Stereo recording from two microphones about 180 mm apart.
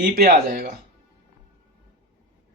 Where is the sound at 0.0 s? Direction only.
55° right (ahead or behind).